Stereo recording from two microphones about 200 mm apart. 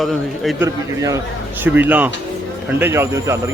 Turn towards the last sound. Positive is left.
turn(degrees=-15)  # may be behind; listen again after turning